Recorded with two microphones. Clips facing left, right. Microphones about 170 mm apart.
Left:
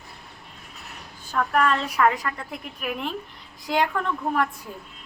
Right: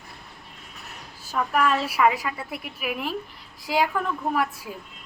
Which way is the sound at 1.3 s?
5° right (ahead or behind).